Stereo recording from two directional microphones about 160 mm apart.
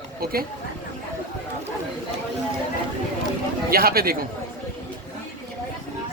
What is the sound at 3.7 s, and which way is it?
Speech, 70° right (ahead or behind).